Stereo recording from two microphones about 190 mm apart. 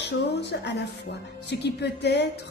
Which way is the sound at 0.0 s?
60° left (ahead or behind).